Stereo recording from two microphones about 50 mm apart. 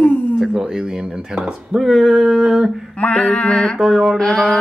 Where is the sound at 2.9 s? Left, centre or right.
Left.